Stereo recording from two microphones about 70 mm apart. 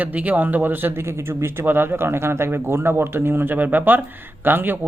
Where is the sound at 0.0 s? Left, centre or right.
Right.